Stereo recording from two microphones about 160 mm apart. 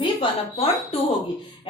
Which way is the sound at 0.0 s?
35° left (ahead or behind).